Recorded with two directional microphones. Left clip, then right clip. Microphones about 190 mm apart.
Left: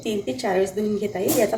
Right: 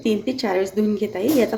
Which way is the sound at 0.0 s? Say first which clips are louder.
Right 3 dB; 50° right (ahead or behind).